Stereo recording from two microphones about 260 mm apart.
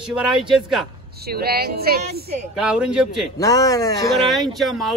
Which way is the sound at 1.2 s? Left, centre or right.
Right.